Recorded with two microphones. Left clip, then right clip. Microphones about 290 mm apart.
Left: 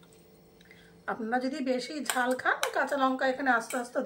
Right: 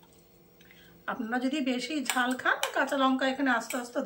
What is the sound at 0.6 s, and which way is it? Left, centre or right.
Speech, centre.